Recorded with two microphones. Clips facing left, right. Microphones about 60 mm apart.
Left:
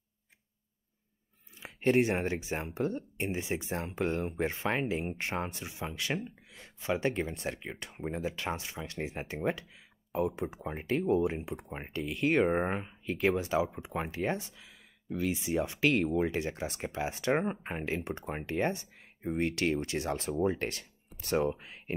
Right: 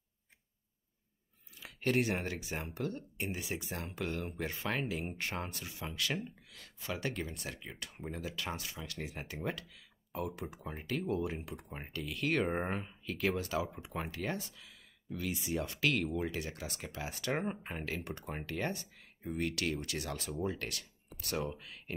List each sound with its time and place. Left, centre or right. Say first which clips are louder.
1.5 s speech: left 6 dB; left